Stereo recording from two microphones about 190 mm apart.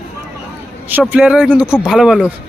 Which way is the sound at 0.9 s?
10° right (ahead or behind).